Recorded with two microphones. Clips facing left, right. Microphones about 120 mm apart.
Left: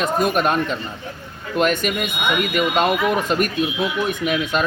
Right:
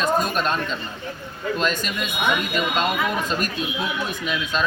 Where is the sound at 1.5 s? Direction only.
65° left (ahead or behind).